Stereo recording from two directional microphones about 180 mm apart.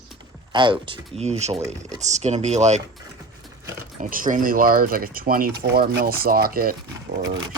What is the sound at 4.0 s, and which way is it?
Speech, 50° right (ahead or behind).